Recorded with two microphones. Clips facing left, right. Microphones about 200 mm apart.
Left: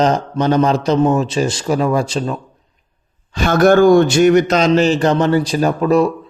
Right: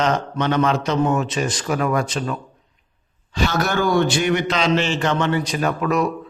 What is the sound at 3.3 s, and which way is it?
A man's voice, 50° left (ahead or behind).